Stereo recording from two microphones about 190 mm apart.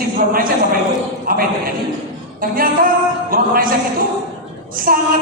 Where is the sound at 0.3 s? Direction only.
50° right (ahead or behind).